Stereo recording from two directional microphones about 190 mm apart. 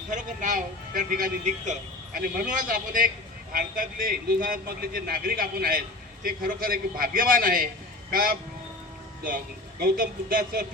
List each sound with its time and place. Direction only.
0.1 s a man's voice: 40° right (ahead or behind)
9.8 s a man's voice: 45° right (ahead or behind)